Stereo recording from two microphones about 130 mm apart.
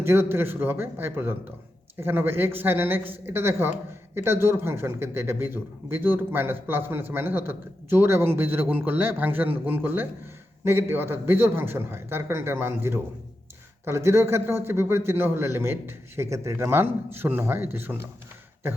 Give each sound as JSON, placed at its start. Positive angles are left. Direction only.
{"t": 0.0, "sound": "a man's voice", "side_deg": -15}